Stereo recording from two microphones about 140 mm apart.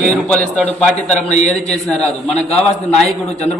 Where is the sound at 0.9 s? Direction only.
55° left (ahead or behind).